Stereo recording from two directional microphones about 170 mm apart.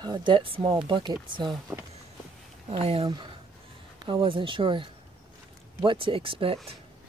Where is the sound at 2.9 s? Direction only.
30° right (ahead or behind).